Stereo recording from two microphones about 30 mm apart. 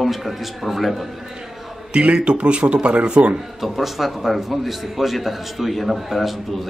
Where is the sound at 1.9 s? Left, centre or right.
Right.